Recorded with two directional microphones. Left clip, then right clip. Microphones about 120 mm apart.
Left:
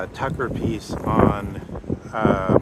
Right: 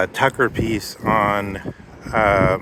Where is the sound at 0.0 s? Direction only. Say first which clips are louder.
Right 9 dB; 40° right (ahead or behind).